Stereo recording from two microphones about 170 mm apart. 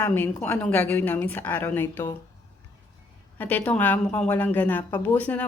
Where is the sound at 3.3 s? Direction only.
10° left (ahead or behind).